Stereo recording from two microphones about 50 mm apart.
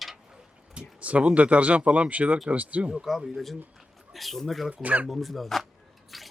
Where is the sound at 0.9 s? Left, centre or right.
Right.